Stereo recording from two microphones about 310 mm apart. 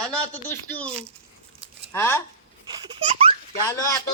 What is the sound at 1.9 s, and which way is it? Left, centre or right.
Speech, centre.